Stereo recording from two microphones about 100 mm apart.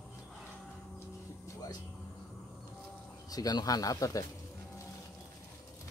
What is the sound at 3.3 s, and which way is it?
Speech, 40° left (ahead or behind).